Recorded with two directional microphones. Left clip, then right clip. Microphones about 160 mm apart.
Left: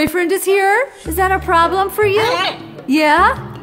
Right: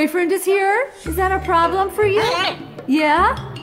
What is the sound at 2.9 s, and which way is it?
Speech, 15° left (ahead or behind).